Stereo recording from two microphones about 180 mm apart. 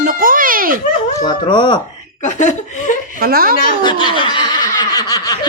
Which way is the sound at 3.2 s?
55° right (ahead or behind).